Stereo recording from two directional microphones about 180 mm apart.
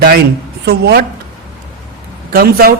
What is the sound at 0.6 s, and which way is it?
Speech, 65° right (ahead or behind).